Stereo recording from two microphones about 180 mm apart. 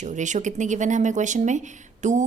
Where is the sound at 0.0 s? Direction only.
40° right (ahead or behind).